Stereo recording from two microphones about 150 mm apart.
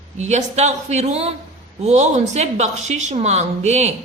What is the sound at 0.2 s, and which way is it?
A woman's voice, 50° right (ahead or behind).